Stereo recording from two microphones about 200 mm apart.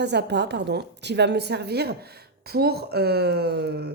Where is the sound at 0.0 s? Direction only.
60° right (ahead or behind).